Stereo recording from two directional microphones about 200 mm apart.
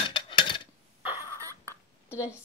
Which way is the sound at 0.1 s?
25° left (ahead or behind).